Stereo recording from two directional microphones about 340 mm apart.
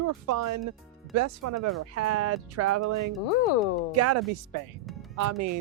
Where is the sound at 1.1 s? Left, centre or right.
Right.